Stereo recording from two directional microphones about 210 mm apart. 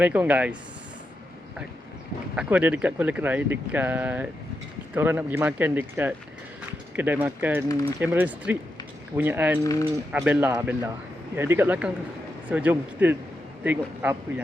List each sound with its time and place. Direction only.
0.0 s speech: 5° right (ahead or behind)
2.3 s speech: 5° right (ahead or behind)
7.7 s speech: 15° left (ahead or behind)
7.9 s speech: 10° right (ahead or behind)